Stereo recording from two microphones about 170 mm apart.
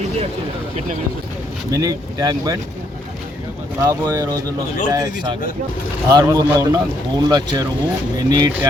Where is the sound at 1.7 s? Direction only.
20° right (ahead or behind).